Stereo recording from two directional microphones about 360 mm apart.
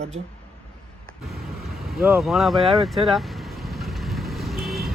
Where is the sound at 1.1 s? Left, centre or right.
Centre.